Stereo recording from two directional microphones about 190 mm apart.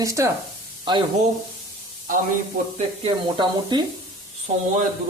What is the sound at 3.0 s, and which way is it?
Speech, 25° right (ahead or behind).